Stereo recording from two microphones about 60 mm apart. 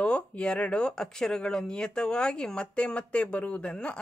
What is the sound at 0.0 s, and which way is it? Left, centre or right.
Speech, centre.